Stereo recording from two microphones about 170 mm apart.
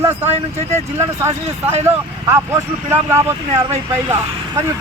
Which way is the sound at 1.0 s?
15° right (ahead or behind).